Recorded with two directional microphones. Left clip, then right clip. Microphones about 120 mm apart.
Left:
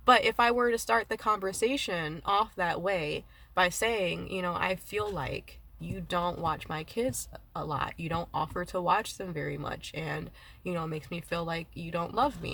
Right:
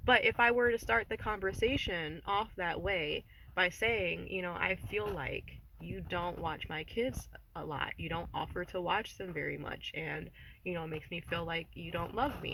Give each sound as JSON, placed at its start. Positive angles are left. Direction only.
{"t": 0.0, "sound": "speech", "side_deg": 40}